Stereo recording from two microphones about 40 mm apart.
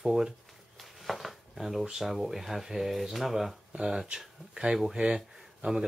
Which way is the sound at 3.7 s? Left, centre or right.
Centre.